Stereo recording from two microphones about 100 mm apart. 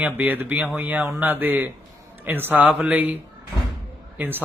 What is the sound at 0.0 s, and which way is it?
Speech, 15° right (ahead or behind).